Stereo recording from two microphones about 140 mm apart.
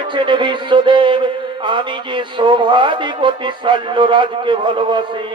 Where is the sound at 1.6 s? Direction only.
35° right (ahead or behind).